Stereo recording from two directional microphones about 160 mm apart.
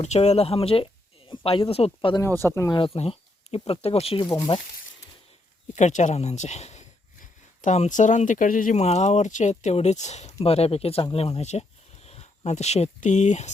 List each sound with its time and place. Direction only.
0.0 s speech: 45° left (ahead or behind)
5.7 s speech: 45° left (ahead or behind)